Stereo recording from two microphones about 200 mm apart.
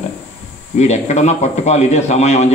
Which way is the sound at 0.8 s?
35° left (ahead or behind).